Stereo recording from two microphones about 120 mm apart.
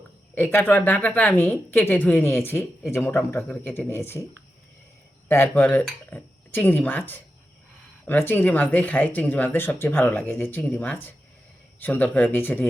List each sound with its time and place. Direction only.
0.3 s speech: 15° left (ahead or behind)
5.3 s speech: 20° left (ahead or behind)